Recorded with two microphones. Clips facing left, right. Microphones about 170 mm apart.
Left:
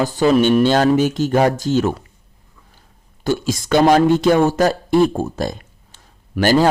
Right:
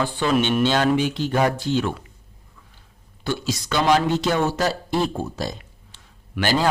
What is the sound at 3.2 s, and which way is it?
A man's voice, 45° left (ahead or behind).